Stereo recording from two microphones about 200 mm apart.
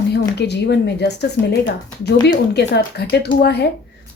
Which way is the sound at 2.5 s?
55° left (ahead or behind).